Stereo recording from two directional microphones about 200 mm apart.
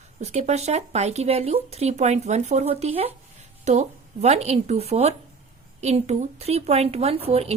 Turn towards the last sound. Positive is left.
turn(degrees=-30)  # may be behind; listen again after turning